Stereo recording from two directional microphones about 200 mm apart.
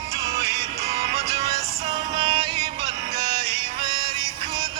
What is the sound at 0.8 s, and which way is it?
Music, 30° right (ahead or behind).